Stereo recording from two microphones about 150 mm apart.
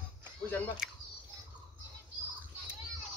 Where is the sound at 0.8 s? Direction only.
5° right (ahead or behind).